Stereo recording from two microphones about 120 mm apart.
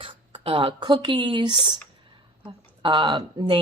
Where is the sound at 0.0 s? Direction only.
45° right (ahead or behind).